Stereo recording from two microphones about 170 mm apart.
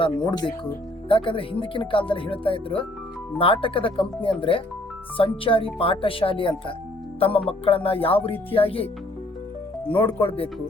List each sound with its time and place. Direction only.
0.0 s speech: 30° left (ahead or behind)